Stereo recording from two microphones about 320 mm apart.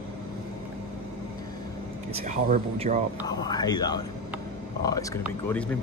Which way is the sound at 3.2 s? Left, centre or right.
Centre.